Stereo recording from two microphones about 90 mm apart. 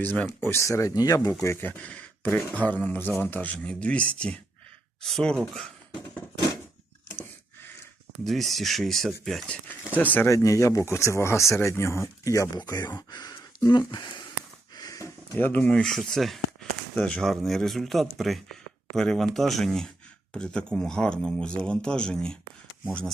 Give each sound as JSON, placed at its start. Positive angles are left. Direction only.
{"t": 0.0, "sound": "speech", "side_deg": 15}
{"t": 0.4, "sound": "speech", "side_deg": 30}
{"t": 1.3, "sound": "speech", "side_deg": 25}
{"t": 1.7, "sound": "speech", "side_deg": 15}
{"t": 8.2, "sound": "speech", "side_deg": 0}
{"t": 9.5, "sound": "speech", "side_deg": 20}
{"t": 10.2, "sound": "speech", "side_deg": 35}
{"t": 12.5, "sound": "speech", "side_deg": 50}
{"t": 14.8, "sound": "a sound", "side_deg": 40}
{"t": 15.4, "sound": "speech", "side_deg": 20}
{"t": 15.7, "sound": "speech", "side_deg": 5}